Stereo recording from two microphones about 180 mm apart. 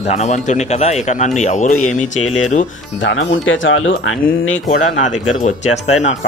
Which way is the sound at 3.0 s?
90° left.